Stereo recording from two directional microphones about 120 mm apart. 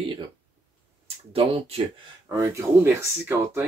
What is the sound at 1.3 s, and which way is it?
Speech, 55° right (ahead or behind).